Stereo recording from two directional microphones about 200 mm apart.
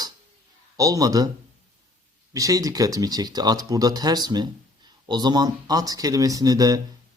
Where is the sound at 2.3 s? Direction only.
15° right (ahead or behind).